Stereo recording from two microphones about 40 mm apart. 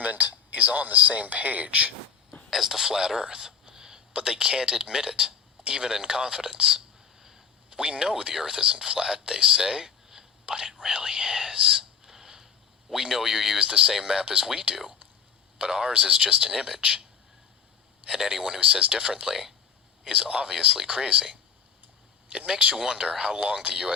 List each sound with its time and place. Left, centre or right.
0.0 s speech: right
2.5 s speech: centre
6.7 s whispering: centre
7.7 s speech: right
10.4 s speech: right
12.0 s a sound: centre
12.9 s speech: centre
15.5 s speech: centre
18.0 s speech: centre
23.3 s speech: right